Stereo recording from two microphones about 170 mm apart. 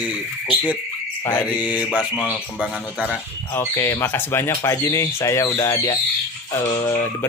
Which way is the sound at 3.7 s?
15° left (ahead or behind).